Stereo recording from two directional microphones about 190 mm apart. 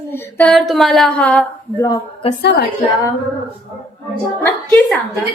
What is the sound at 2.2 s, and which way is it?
Speech, 30° left (ahead or behind).